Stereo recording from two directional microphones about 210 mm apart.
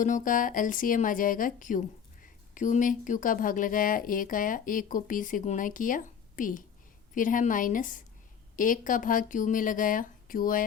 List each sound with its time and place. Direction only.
0.0 s speech: 40° left (ahead or behind)